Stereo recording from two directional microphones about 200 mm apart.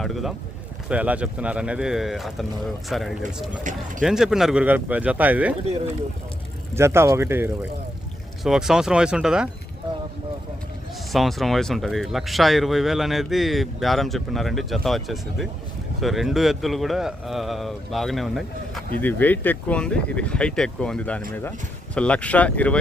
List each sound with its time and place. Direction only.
0.0 s speech: centre (ahead or behind)
3.6 s speech: 40° right (ahead or behind)
4.0 s speech: centre (ahead or behind)
6.7 s speech: 15° right (ahead or behind)
11.1 s speech: centre (ahead or behind)